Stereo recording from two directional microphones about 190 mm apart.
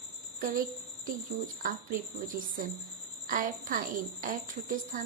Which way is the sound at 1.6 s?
45° right (ahead or behind).